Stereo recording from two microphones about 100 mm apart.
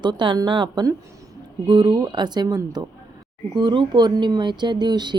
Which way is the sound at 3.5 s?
50° right (ahead or behind).